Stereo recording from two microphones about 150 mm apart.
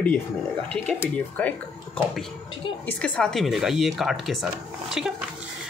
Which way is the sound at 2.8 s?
10° left (ahead or behind).